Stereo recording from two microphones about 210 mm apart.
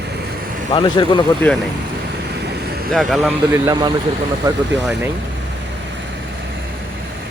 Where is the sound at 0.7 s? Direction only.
20° left (ahead or behind).